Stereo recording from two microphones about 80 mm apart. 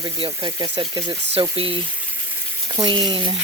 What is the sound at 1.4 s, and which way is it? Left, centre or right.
Speech, right.